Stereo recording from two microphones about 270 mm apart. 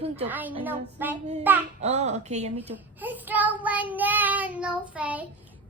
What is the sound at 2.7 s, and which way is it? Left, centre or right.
Child singing, centre.